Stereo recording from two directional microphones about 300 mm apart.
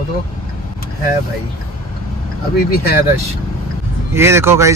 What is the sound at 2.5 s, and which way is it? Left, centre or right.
Speech, left.